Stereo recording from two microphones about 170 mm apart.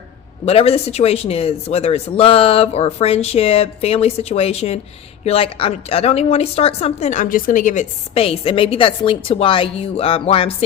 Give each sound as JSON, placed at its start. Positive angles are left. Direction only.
{"t": 0.4, "sound": "a woman's voice", "side_deg": 35}